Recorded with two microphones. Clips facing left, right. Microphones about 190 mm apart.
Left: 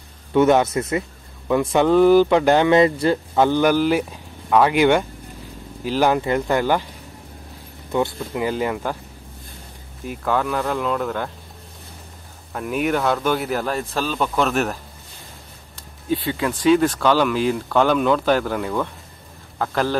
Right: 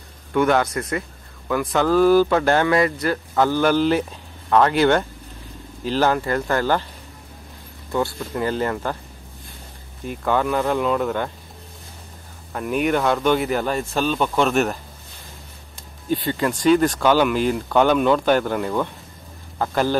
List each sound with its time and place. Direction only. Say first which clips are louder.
0.3 s a man's voice: left 3 dB; 20° left (ahead or behind)
7.9 s speech: left 1 dB; 20° left (ahead or behind)
10.0 s speech: right 1 dB; centre (ahead or behind)
12.5 s speech: right 1 dB; centre (ahead or behind)
16.1 s speech: even; centre (ahead or behind)